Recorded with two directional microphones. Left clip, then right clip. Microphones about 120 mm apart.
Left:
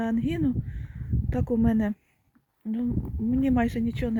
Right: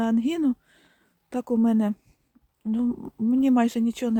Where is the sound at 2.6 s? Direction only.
35° right (ahead or behind).